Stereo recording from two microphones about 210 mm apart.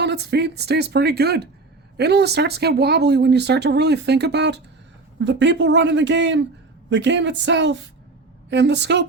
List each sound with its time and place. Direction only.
0.0 s speech: 55° right (ahead or behind)